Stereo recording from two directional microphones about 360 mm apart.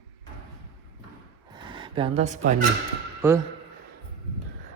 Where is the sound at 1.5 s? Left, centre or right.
Centre.